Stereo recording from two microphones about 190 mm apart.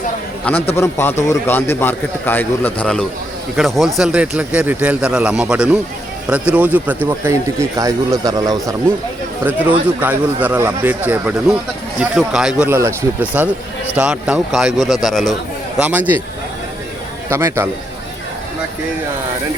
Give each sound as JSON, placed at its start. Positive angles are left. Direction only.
{"t": 0.5, "sound": "a man's voice", "side_deg": 5}
{"t": 9.4, "sound": "speech", "side_deg": -10}
{"t": 17.2, "sound": "a man's voice", "side_deg": -15}